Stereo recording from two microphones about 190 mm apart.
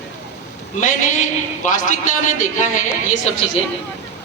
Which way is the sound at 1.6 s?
45° left (ahead or behind).